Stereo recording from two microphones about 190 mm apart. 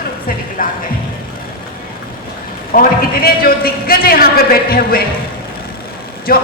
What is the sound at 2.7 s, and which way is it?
A woman's voice, 50° left (ahead or behind).